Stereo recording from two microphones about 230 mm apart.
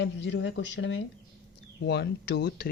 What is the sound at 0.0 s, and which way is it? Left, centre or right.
Speech, left.